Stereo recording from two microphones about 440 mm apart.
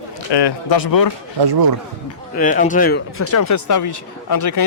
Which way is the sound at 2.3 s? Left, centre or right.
Centre.